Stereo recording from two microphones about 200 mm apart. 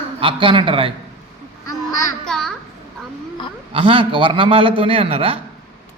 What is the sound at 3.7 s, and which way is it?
A man's voice, 25° right (ahead or behind).